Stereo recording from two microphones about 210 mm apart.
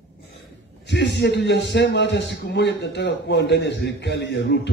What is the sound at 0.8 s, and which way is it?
A man's voice, 55° left (ahead or behind).